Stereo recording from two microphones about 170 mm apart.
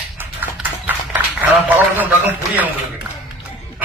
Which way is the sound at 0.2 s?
10° right (ahead or behind).